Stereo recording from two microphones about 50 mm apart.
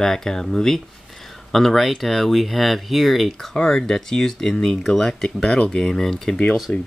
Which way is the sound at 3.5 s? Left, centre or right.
Centre.